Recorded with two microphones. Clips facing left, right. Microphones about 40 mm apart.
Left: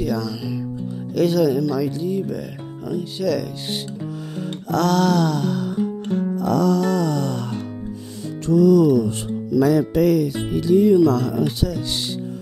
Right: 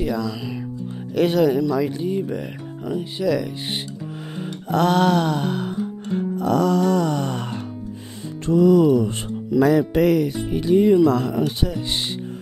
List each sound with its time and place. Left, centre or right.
0.0 s music: right
1.1 s speech: right
2.9 s music: right
8.5 s speech: right